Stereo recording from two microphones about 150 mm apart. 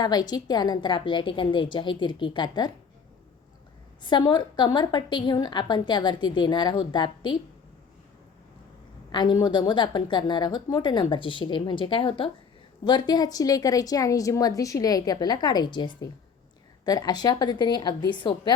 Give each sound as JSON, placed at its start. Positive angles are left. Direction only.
{"t": 0.0, "sound": "a woman's voice", "side_deg": 25}
{"t": 4.0, "sound": "a woman's voice", "side_deg": 30}
{"t": 9.1, "sound": "a woman's voice", "side_deg": 30}